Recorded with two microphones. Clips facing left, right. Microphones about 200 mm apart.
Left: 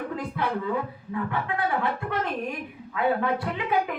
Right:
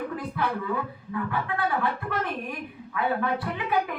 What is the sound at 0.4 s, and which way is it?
Music, 20° left (ahead or behind).